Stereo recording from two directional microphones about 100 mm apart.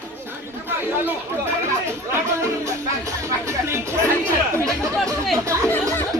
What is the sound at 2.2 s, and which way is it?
Music, 30° right (ahead or behind).